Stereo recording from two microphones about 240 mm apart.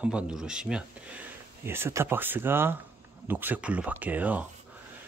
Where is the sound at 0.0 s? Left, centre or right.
Centre.